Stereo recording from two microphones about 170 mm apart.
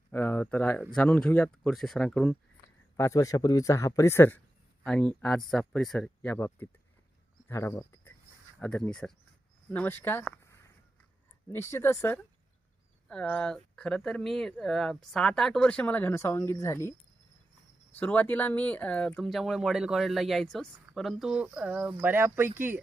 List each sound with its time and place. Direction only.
0.1 s speech: 10° left (ahead or behind)
3.0 s speech: 20° left (ahead or behind)
7.4 s cricket: 15° left (ahead or behind)
8.5 s speech: 5° left (ahead or behind)
11.4 s speech: 15° left (ahead or behind)
17.9 s speech: 10° left (ahead or behind); by 22.8 s 10° right (ahead or behind)